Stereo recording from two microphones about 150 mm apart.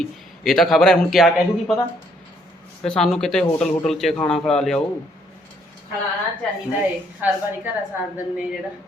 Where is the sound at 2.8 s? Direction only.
5° left (ahead or behind).